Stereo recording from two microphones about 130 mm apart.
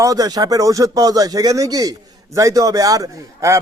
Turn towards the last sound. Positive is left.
turn(degrees=-25)  # may be behind; listen again after turning